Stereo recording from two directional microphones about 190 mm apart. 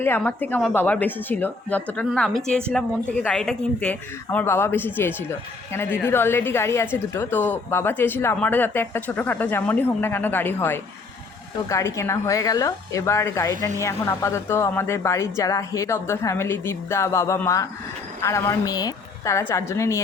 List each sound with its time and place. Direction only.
0.0 s a woman's voice: 10° left (ahead or behind)